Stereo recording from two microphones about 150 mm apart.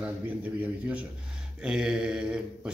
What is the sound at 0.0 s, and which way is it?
Speech, 10° right (ahead or behind).